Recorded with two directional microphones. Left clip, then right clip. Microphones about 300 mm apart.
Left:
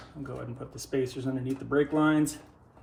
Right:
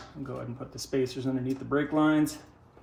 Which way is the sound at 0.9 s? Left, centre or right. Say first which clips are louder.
Right 1 dB; centre.